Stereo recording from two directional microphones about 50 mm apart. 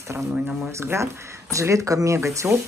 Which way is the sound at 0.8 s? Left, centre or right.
Right.